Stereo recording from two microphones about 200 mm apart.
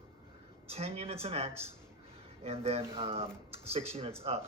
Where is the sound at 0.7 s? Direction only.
30° right (ahead or behind).